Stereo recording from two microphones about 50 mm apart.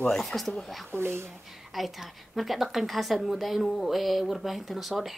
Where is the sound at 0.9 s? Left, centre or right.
Right.